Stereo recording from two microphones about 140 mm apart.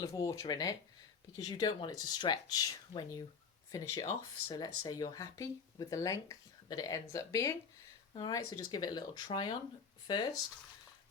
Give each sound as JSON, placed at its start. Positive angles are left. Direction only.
{"t": 0.0, "sound": "speech", "side_deg": 20}